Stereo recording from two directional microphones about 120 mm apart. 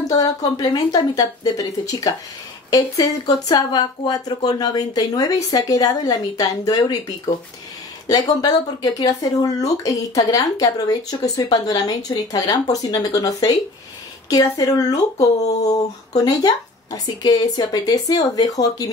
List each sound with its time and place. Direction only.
0.1 s speech: 35° left (ahead or behind)
8.1 s speech: 35° left (ahead or behind)